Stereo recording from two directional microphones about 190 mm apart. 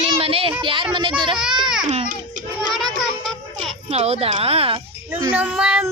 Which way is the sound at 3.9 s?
35° right (ahead or behind).